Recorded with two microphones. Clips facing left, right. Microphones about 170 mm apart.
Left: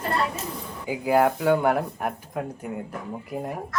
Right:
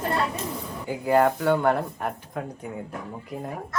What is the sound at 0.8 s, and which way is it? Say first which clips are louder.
Speech: even; 10° left (ahead or behind).